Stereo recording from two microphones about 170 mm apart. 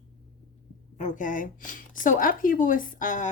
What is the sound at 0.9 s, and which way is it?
Speech, 50° left (ahead or behind).